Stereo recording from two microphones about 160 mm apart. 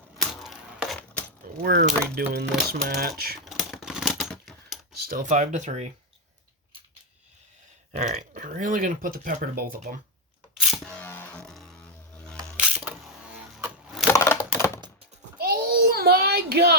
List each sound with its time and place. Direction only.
0.2 s a sound: centre (ahead or behind)
1.6 s speech: 75° right (ahead or behind)
3.4 s typewriter: centre (ahead or behind)
5.0 s speech: 60° right (ahead or behind)
5.3 s speech: 50° right (ahead or behind)
7.9 s speech: 45° right (ahead or behind)
10.5 s music: centre (ahead or behind)
10.9 s music: 15° left (ahead or behind)
12.1 s camera: 5° left (ahead or behind)
12.5 s wood: 5° right (ahead or behind)
15.4 s child singing: 70° right (ahead or behind); by 16.7 s 90° right